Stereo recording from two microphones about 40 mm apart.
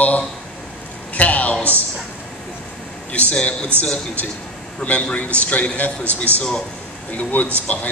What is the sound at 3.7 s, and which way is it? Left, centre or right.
Speech, right.